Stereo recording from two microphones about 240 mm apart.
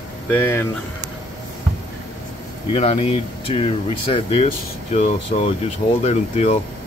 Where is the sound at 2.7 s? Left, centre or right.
Left.